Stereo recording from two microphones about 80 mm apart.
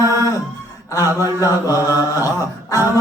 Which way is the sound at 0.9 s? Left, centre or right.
Left.